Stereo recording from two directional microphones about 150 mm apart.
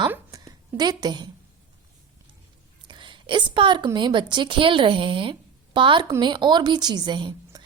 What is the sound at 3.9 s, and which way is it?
A woman's voice, 30° right (ahead or behind).